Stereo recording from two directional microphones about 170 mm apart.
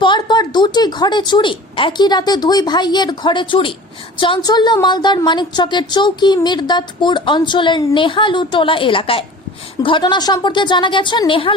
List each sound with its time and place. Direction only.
0.0 s a woman's voice: 25° left (ahead or behind)